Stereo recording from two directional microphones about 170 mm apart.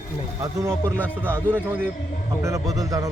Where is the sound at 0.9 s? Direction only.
10° right (ahead or behind).